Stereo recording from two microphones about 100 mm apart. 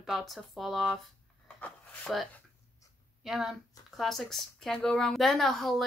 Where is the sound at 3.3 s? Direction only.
5° right (ahead or behind).